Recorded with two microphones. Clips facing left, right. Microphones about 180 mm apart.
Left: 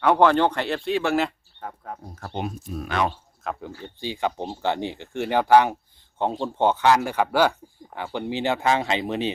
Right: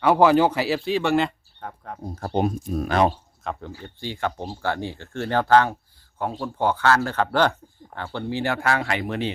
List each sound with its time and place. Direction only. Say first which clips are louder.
0.0 s speech: right 1 dB; 5° right (ahead or behind)
2.0 s speech: right 8 dB; 35° right (ahead or behind)
3.4 s speech: even; centre (ahead or behind)
3.8 s speech: left 1 dB; 15° left (ahead or behind)